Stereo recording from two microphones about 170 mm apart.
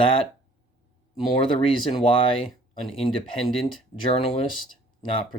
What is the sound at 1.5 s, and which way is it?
Speech, 30° left (ahead or behind).